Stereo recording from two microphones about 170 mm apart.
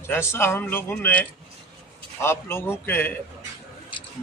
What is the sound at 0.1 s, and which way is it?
Speech, 15° left (ahead or behind).